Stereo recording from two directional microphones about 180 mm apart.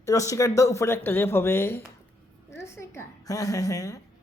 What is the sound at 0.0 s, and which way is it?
A man's voice, 20° left (ahead or behind).